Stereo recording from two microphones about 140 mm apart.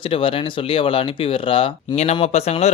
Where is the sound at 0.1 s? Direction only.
40° left (ahead or behind).